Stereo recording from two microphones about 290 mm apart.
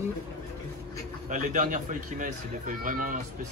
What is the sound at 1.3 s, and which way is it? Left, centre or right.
A man's voice, right.